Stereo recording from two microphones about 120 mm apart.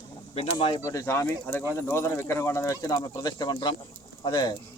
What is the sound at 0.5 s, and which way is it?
Speech, 40° left (ahead or behind).